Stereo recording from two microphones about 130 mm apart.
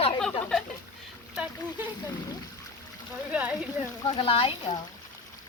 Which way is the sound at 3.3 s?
10° right (ahead or behind).